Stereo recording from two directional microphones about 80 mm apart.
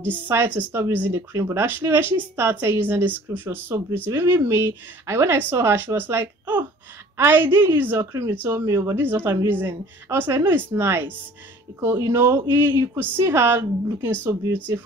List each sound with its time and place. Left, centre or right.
0.0 s a woman's voice: right
3.3 s a woman's voice: right